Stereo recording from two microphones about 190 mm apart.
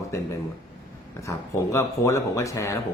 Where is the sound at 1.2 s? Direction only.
15° left (ahead or behind).